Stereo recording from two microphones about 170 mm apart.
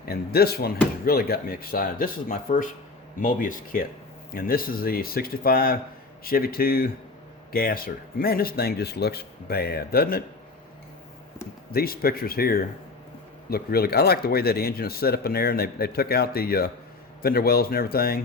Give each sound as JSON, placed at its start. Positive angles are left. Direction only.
{"t": 0.1, "sound": "speech", "side_deg": 65}
{"t": 11.7, "sound": "speech", "side_deg": 65}